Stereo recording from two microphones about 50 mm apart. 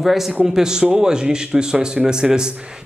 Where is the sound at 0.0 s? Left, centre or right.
Centre.